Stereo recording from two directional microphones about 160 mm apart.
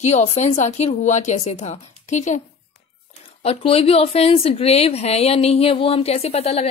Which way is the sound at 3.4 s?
40° left (ahead or behind).